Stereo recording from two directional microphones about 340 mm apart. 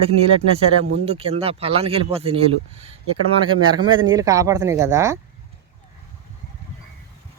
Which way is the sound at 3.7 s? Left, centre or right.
Right.